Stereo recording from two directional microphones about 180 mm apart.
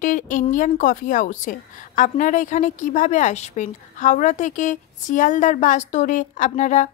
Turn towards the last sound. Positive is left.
turn(degrees=40)  # may be behind; listen again after turning